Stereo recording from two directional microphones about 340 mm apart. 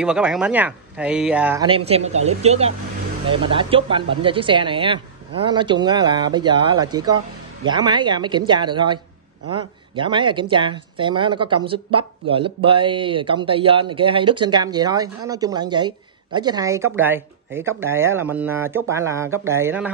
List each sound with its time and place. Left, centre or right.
0.0 s speech: centre